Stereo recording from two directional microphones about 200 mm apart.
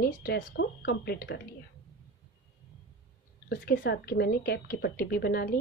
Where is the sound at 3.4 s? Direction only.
50° left (ahead or behind).